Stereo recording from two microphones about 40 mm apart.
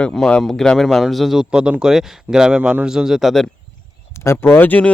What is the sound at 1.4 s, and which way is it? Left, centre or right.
Speech, right.